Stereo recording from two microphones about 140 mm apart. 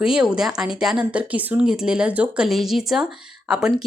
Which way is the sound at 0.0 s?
5° right (ahead or behind).